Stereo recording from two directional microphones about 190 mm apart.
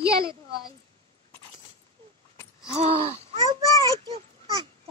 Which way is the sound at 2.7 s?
30° right (ahead or behind).